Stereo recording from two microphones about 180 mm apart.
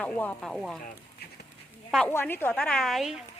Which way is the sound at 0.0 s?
5° left (ahead or behind).